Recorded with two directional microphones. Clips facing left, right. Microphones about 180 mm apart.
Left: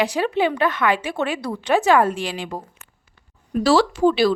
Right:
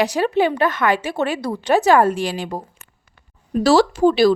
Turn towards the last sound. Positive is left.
turn(degrees=-40)  # may be behind; listen again after turning